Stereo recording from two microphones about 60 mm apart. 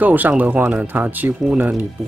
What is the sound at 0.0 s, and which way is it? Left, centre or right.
Speech, right.